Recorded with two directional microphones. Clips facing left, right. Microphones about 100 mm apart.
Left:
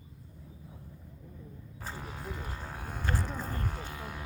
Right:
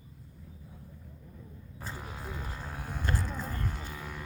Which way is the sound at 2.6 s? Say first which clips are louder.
Right 1 dB; 10° left (ahead or behind).